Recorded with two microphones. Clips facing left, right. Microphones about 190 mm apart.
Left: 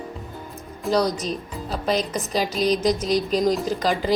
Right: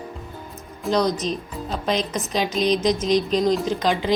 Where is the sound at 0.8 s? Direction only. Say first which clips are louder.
Right 1 dB; 10° left (ahead or behind).